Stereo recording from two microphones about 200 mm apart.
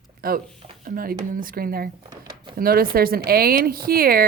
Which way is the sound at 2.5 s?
45° right (ahead or behind).